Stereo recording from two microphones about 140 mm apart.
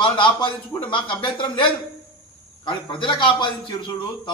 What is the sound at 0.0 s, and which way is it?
A man's voice, 35° left (ahead or behind).